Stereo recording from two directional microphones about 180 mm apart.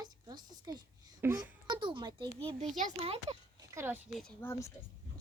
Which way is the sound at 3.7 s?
15° right (ahead or behind).